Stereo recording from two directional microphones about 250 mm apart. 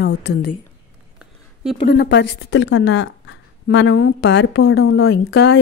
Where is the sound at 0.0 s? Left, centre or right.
Left.